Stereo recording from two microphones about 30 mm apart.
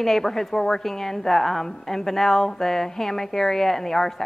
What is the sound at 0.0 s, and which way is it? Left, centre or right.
A woman's voice, centre.